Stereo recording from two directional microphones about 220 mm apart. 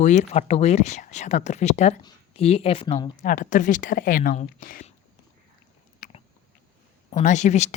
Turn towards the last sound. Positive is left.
turn(degrees=30)  # may be behind; listen again after turning